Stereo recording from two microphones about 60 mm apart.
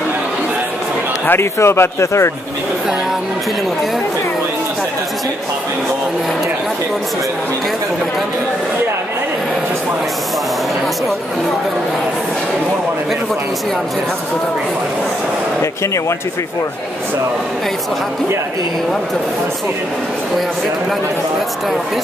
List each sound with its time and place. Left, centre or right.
1.2 s speech: left
15.6 s speech: left